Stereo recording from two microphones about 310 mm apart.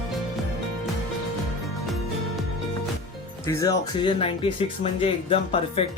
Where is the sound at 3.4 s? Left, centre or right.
Centre.